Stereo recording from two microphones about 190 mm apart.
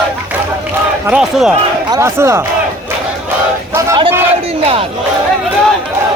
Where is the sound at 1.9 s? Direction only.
15° right (ahead or behind).